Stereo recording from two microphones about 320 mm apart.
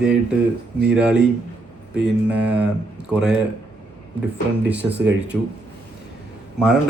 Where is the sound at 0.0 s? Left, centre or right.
Centre.